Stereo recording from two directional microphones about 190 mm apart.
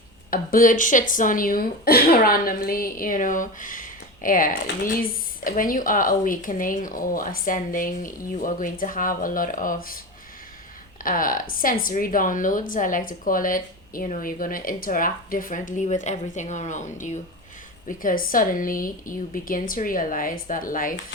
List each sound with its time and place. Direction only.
0.3 s a woman's voice: 50° left (ahead or behind)
11.0 s a woman's voice: 45° left (ahead or behind)